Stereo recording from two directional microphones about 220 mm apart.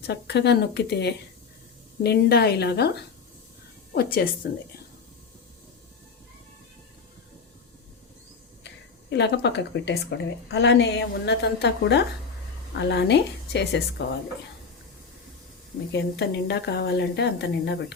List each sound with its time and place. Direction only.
0.1 s speech: 50° left (ahead or behind)
8.6 s speech: 50° left (ahead or behind)
15.9 s speech: 50° left (ahead or behind)